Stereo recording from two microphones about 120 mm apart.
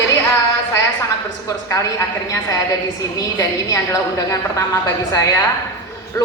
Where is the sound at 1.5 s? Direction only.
25° left (ahead or behind).